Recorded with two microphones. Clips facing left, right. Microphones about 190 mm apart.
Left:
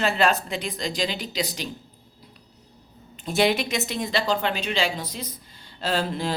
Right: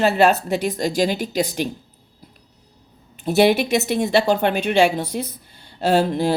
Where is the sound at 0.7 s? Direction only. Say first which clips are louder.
Right 8 dB; 45° right (ahead or behind).